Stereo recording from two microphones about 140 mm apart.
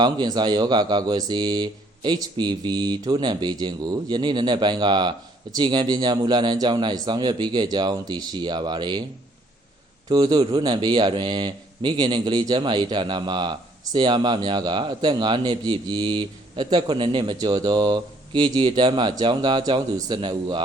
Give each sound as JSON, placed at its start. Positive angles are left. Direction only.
{"t": 0.0, "sound": "a man's voice", "side_deg": -30}
{"t": 10.1, "sound": "a man's voice", "side_deg": -30}